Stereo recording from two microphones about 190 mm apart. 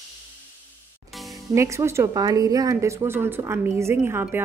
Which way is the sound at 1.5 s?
15° right (ahead or behind).